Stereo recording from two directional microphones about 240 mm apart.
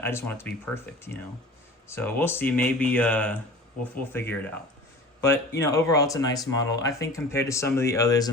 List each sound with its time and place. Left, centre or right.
0.0 s speech: centre